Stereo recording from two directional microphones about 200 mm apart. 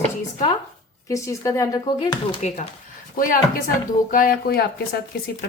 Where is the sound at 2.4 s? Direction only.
35° left (ahead or behind).